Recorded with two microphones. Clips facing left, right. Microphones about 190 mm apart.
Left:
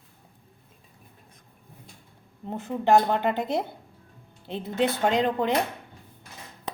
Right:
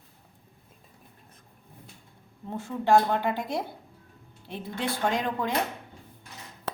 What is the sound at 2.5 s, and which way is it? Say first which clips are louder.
Speech: left 2 dB; 20° left (ahead or behind).